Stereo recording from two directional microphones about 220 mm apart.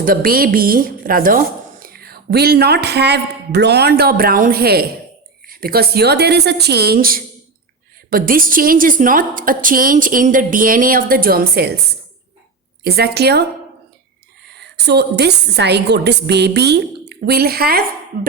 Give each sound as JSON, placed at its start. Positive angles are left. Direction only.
{"t": 0.0, "sound": "a woman's voice", "side_deg": -40}
{"t": 12.8, "sound": "a woman's voice", "side_deg": -45}
{"t": 14.4, "sound": "a woman's voice", "side_deg": -50}